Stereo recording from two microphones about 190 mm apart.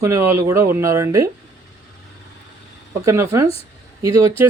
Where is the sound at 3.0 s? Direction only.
15° right (ahead or behind).